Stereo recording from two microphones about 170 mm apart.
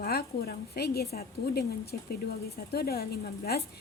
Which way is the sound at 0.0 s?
65° left (ahead or behind).